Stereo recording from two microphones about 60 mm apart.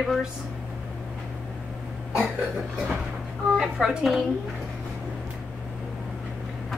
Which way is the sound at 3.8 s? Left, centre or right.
Centre.